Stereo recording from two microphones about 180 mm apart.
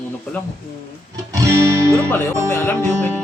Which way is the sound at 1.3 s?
15° right (ahead or behind).